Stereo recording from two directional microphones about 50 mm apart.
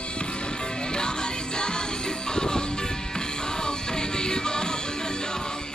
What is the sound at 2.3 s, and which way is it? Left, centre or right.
Music, centre.